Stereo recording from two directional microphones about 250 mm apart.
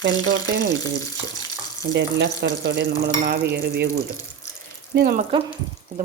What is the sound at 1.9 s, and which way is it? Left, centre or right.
Speech, right.